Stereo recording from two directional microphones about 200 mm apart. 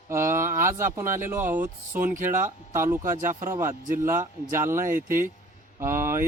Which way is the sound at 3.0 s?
40° right (ahead or behind).